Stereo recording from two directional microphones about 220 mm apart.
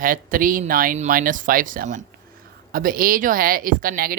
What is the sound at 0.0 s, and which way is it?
Speech, 40° right (ahead or behind).